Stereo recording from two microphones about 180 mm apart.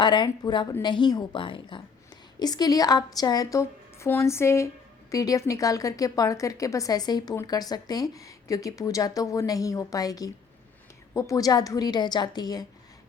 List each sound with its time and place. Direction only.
0.0 s a woman's voice: 25° left (ahead or behind)